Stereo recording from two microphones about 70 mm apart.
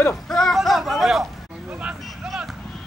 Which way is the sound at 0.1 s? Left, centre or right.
Centre.